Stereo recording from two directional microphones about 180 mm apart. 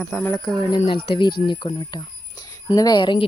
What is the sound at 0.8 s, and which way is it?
Speech, 30° left (ahead or behind).